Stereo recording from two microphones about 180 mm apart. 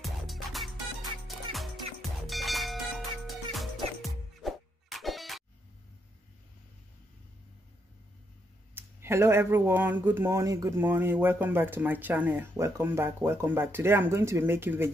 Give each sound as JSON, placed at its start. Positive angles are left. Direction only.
{"t": 0.0, "sound": "music", "side_deg": 0}
{"t": 8.7, "sound": "speech", "side_deg": -15}